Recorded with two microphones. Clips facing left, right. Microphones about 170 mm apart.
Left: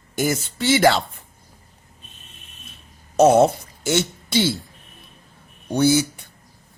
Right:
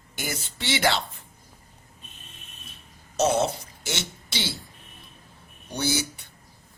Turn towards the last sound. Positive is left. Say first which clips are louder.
# left 10 dB
turn(degrees=50)  # may be behind; listen again after turning